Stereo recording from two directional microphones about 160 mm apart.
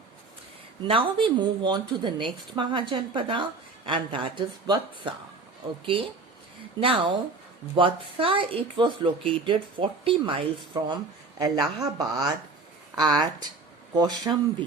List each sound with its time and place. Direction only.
0.9 s speech: 35° right (ahead or behind)